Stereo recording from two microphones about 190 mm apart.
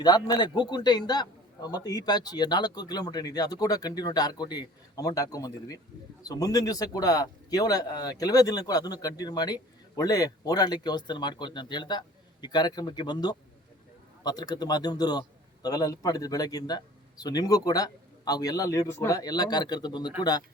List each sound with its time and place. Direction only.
0.0 s a man's voice: 20° left (ahead or behind)